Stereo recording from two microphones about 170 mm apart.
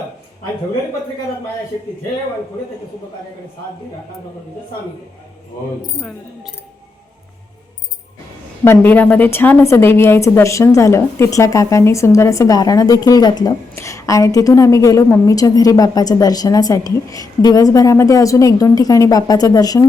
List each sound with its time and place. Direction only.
6.0 s speech: centre (ahead or behind)
8.6 s a woman's voice: 10° left (ahead or behind)